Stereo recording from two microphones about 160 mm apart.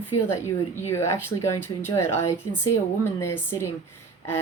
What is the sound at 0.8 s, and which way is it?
A woman's voice, 15° left (ahead or behind).